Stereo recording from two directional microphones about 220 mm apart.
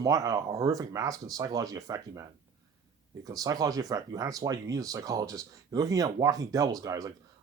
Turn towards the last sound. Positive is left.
turn(degrees=-15)  # may be behind; listen again after turning